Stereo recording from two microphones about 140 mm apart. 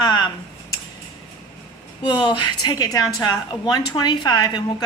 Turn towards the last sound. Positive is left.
turn(degrees=30)  # may be behind; listen again after turning